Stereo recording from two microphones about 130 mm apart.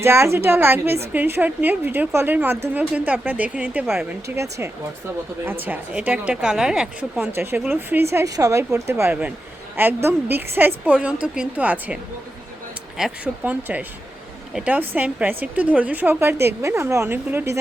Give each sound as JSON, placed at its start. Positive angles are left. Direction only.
{"t": 0.0, "sound": "a woman's voice", "side_deg": -20}
{"t": 4.4, "sound": "speech", "side_deg": -20}
{"t": 5.5, "sound": "a woman's voice", "side_deg": -10}
{"t": 13.0, "sound": "a woman's voice", "side_deg": -5}